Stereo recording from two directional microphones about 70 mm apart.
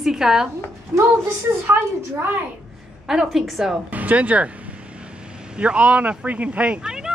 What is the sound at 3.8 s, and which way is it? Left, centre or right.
Speech, right.